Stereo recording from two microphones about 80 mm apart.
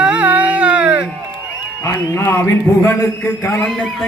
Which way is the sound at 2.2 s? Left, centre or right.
Left.